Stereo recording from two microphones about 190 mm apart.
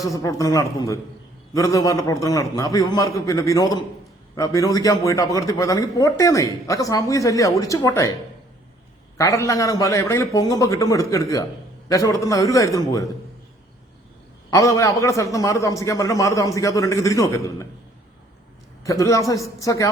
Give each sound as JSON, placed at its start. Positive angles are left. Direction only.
{"t": 0.0, "sound": "a man's voice", "side_deg": 20}
{"t": 9.1, "sound": "a man's voice", "side_deg": 15}
{"t": 14.5, "sound": "a man's voice", "side_deg": 15}
{"t": 18.9, "sound": "a man's voice", "side_deg": 15}